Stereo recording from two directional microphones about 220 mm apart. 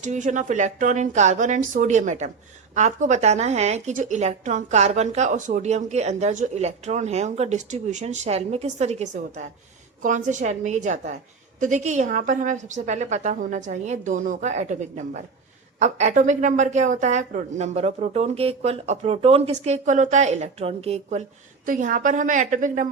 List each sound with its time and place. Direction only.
0.0 s a woman's voice: 35° right (ahead or behind)